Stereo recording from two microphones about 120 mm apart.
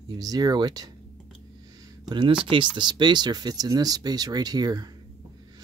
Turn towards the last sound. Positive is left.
turn(degrees=-35)  # may be behind; listen again after turning